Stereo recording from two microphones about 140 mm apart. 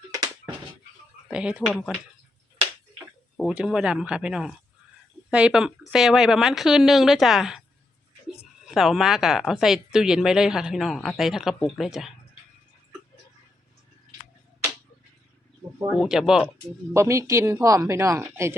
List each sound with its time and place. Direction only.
1.3 s speech: 5° right (ahead or behind)
3.3 s a woman's voice: 5° right (ahead or behind)
8.6 s a woman's voice: centre (ahead or behind)
16.0 s a woman's voice: 5° right (ahead or behind)
16.9 s speech: 20° right (ahead or behind)